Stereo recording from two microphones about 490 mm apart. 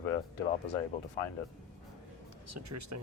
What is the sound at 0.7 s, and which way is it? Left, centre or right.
Speech, left.